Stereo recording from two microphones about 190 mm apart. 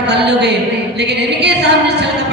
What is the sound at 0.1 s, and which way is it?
Music, 65° right (ahead or behind).